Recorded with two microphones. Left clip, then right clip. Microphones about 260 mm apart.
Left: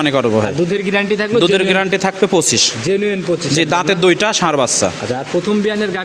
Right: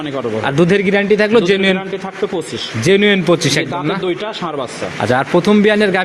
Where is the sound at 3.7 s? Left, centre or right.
Left.